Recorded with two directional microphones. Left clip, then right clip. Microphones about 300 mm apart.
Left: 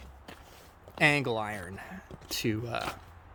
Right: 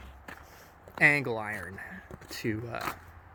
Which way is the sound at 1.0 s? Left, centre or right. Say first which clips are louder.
Right 2 dB; centre.